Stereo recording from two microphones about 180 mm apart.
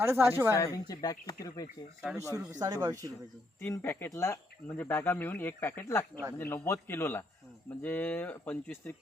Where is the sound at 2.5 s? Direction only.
20° right (ahead or behind).